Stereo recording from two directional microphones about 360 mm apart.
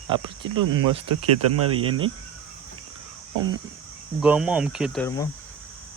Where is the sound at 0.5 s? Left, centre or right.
Right.